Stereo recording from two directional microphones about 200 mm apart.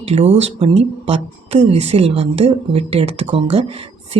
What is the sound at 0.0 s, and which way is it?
Speech, 35° right (ahead or behind).